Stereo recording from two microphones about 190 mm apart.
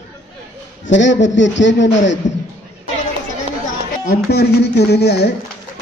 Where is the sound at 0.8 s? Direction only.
70° left (ahead or behind).